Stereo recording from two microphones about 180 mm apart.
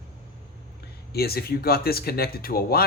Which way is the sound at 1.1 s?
60° left (ahead or behind).